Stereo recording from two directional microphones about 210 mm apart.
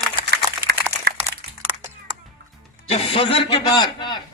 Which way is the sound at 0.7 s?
50° right (ahead or behind).